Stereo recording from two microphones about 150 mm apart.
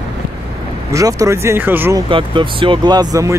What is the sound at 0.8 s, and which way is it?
Speech, 20° right (ahead or behind).